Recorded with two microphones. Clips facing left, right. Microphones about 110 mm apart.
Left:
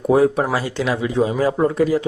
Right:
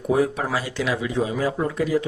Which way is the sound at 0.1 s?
35° left (ahead or behind).